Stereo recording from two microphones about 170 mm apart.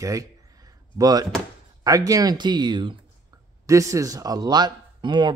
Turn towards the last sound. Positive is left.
turn(degrees=-25)  # may be behind; listen again after turning